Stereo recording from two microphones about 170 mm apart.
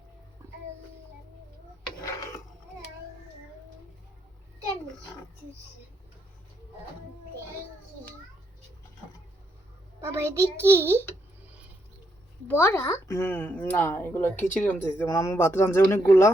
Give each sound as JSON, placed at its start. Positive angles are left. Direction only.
{"t": 2.0, "sound": "filing", "side_deg": 20}
{"t": 10.0, "sound": "a child's voice", "side_deg": -15}
{"t": 12.5, "sound": "speech", "side_deg": 15}